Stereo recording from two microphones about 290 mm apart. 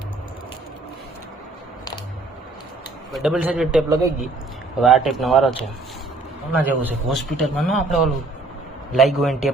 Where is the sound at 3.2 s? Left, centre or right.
Centre.